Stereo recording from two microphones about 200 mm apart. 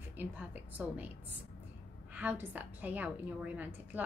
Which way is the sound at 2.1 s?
5° right (ahead or behind).